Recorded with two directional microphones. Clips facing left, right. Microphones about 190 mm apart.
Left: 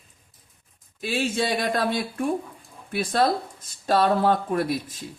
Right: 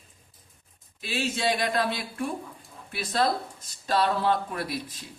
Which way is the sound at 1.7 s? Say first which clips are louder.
Left 3 dB; 50° left (ahead or behind).